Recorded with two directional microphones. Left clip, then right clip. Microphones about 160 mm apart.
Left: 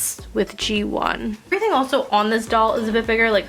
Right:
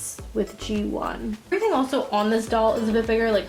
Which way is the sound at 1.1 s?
25° left (ahead or behind).